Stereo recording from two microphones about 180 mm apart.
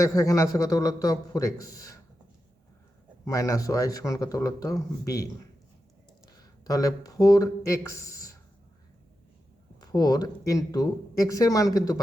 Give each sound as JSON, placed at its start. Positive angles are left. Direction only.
{"t": 0.0, "sound": "a man's voice", "side_deg": 15}
{"t": 3.2, "sound": "speech", "side_deg": 20}
{"t": 6.7, "sound": "a man's voice", "side_deg": 20}
{"t": 9.9, "sound": "speech", "side_deg": 20}